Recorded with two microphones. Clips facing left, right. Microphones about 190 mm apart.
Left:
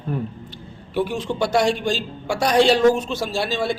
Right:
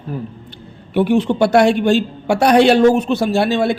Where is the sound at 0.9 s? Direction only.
65° right (ahead or behind).